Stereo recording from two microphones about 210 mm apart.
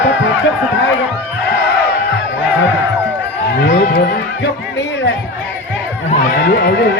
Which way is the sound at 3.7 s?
45° left (ahead or behind).